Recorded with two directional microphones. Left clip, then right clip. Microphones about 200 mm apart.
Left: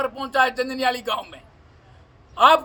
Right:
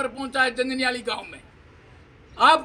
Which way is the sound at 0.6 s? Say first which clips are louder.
Left 2 dB; 25° left (ahead or behind).